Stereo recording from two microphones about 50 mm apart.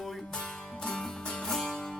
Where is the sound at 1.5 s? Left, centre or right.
Centre.